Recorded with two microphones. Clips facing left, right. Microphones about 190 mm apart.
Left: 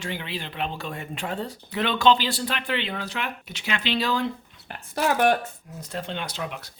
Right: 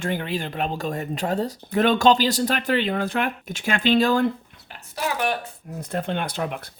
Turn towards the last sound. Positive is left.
turn(degrees=-55)  # may be behind; listen again after turning